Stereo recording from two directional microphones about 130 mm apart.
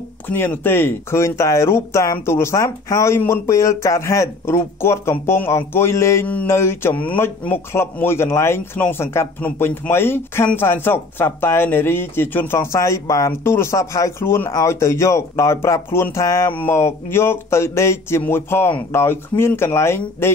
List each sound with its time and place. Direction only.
0.4 s speech: 15° left (ahead or behind)